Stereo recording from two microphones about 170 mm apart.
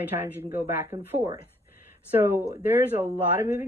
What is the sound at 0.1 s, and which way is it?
A woman's voice, 15° right (ahead or behind).